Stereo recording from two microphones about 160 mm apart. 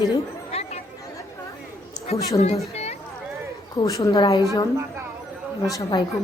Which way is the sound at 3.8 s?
20° left (ahead or behind).